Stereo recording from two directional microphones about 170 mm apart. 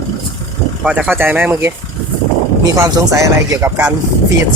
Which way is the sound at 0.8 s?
5° right (ahead or behind).